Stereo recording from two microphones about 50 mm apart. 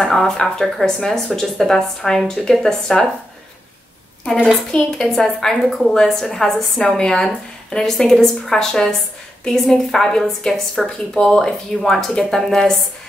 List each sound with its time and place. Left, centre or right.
0.0 s a woman's voice: centre
4.7 s a woman's voice: centre